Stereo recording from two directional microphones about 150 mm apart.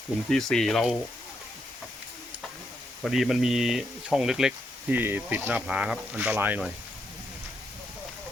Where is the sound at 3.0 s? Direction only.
Centre (ahead or behind).